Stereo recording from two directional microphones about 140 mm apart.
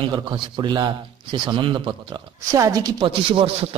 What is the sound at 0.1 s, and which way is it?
Speech, 30° right (ahead or behind).